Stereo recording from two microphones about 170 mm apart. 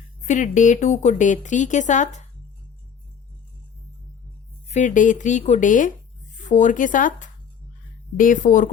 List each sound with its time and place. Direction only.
0.3 s speech: 45° left (ahead or behind)
4.7 s speech: 50° left (ahead or behind)